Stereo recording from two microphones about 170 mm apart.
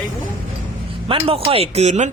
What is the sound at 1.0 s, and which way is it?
Speech, 35° right (ahead or behind).